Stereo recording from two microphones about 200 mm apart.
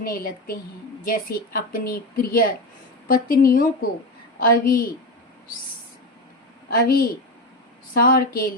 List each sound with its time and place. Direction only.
0.0 s a woman's voice: 45° left (ahead or behind)
6.7 s a woman's voice: 50° left (ahead or behind)
8.0 s a woman's voice: 45° left (ahead or behind)